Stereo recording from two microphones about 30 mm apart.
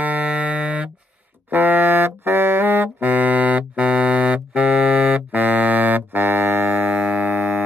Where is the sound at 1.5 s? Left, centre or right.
Right.